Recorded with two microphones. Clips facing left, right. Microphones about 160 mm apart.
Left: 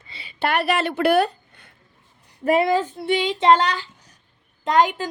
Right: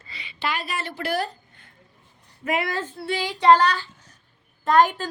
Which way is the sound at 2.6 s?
15° left (ahead or behind).